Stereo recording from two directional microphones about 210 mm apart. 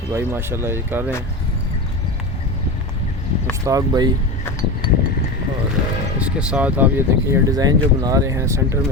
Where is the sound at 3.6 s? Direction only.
15° right (ahead or behind).